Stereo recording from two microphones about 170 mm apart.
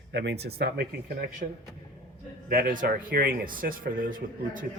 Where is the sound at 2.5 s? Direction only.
55° right (ahead or behind).